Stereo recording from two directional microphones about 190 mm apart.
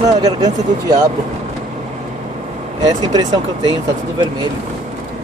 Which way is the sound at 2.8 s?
20° right (ahead or behind).